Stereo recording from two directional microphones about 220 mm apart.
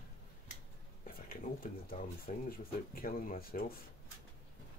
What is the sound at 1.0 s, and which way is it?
Speech, 40° left (ahead or behind).